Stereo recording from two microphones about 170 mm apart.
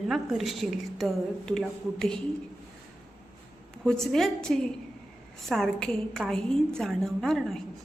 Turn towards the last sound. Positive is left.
turn(degrees=0)  # may be behind; listen again after turning